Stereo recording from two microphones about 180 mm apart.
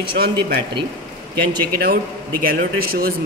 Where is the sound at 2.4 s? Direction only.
55° right (ahead or behind).